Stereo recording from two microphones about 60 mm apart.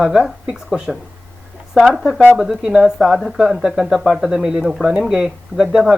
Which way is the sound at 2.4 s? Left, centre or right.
Centre.